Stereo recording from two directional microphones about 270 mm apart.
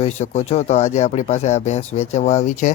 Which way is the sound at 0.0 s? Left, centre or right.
Left.